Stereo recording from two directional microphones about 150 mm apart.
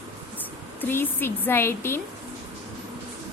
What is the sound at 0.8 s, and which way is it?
A woman's voice, 15° left (ahead or behind).